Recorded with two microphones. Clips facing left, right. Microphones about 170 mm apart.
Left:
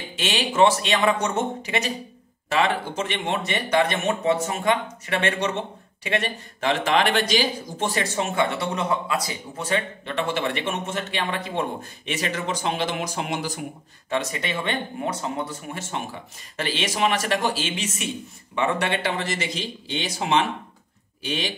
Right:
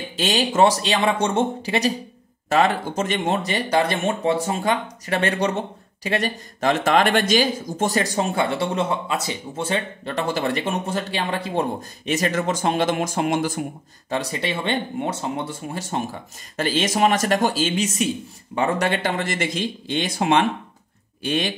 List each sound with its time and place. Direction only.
0.1 s speech: 40° right (ahead or behind)
14.0 s speech: 35° right (ahead or behind); by 21.5 s 50° right (ahead or behind)